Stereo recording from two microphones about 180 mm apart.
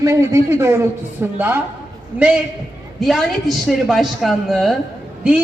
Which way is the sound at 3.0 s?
Centre (ahead or behind).